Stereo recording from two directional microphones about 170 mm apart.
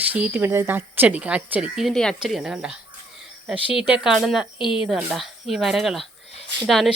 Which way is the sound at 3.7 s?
5° right (ahead or behind).